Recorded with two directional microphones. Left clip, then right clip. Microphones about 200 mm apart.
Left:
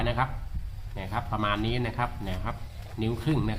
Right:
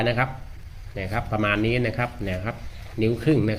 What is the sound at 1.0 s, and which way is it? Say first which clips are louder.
Speech: right 5 dB; centre (ahead or behind).